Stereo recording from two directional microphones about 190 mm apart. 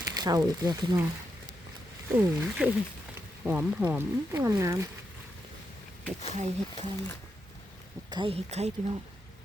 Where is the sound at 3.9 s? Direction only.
15° right (ahead or behind).